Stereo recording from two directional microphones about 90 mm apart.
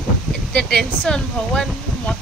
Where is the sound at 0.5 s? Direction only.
10° left (ahead or behind).